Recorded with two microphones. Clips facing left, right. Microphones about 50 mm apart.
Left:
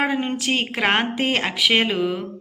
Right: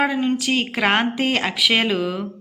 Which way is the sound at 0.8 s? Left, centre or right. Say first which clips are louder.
Right 1 dB; centre.